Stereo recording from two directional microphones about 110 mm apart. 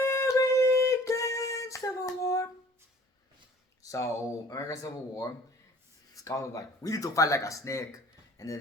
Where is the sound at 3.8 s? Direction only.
30° left (ahead or behind).